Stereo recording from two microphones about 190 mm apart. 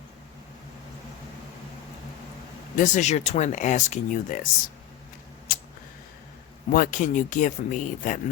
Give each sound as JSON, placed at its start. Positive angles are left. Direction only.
{"t": 2.7, "sound": "speech", "side_deg": 40}
{"t": 6.7, "sound": "speech", "side_deg": 45}